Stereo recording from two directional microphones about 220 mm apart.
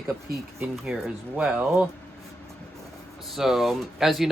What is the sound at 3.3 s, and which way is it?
Speech, centre (ahead or behind).